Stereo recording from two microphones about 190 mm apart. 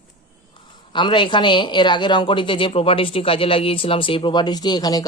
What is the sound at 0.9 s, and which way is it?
Speech, 25° left (ahead or behind).